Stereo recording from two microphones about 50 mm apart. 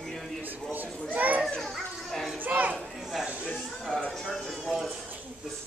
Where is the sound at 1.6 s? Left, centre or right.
Centre.